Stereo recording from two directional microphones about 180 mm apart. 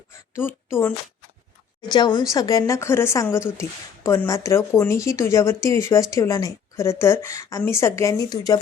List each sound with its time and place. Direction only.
0.3 s speech: 15° left (ahead or behind)
1.9 s speech: 25° left (ahead or behind)